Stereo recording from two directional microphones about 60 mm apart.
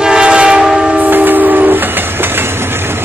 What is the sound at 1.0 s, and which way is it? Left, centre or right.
Train, right.